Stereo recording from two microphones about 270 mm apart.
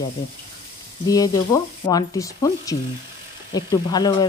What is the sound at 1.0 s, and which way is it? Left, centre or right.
A woman's voice, centre.